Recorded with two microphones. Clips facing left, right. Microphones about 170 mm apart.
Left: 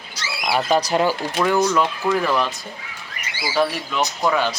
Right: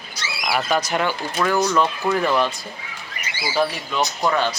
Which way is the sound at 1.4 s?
10° left (ahead or behind).